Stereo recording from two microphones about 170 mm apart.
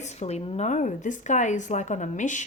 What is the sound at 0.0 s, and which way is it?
A woman's voice, 40° left (ahead or behind).